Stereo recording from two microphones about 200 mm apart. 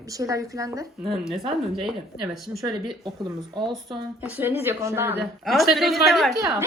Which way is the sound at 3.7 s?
5° right (ahead or behind).